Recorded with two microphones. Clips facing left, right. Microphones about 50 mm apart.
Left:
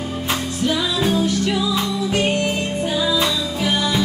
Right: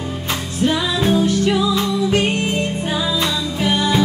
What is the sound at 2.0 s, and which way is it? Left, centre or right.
Music, right.